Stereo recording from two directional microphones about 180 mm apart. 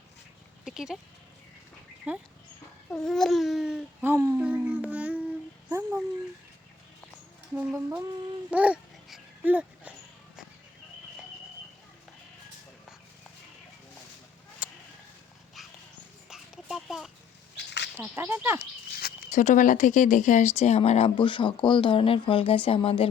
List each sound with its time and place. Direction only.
0.6 s speech: 5° right (ahead or behind)
2.1 s speech: 10° right (ahead or behind)
2.9 s speech: 5° left (ahead or behind)
5.6 s a sound: 15° right (ahead or behind)
7.5 s speech: 10° right (ahead or behind)
14.6 s a sound: 10° right (ahead or behind)
16.3 s a sound: centre (ahead or behind)
17.6 s bird: 70° left (ahead or behind)
17.9 s speech: 15° right (ahead or behind)
18.9 s speech: 55° left (ahead or behind); by 23.0 s 30° left (ahead or behind)